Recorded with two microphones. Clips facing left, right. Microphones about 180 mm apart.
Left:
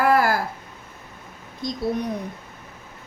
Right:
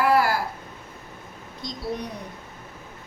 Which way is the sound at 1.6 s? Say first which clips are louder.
Left 7 dB; 50° left (ahead or behind).